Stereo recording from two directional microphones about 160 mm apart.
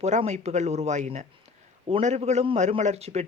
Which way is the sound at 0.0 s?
45° right (ahead or behind).